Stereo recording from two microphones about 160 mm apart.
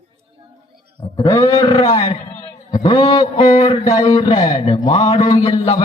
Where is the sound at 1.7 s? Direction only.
35° left (ahead or behind).